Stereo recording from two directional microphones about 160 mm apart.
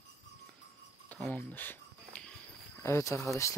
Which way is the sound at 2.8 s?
20° left (ahead or behind).